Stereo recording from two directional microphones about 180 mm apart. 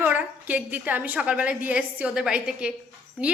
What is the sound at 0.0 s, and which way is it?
A woman's voice, 10° right (ahead or behind).